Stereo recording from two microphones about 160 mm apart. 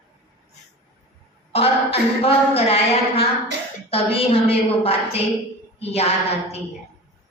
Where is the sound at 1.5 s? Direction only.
35° left (ahead or behind).